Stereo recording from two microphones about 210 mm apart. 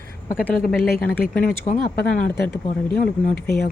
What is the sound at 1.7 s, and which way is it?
Speech, 30° left (ahead or behind).